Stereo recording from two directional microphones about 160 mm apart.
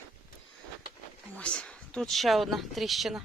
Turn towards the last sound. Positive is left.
turn(degrees=0)  # may be behind; listen again after turning